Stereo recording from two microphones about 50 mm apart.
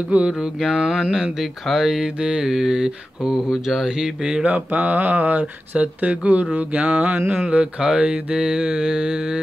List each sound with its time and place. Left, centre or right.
0.3 s mantra: centre
4.3 s mantra: right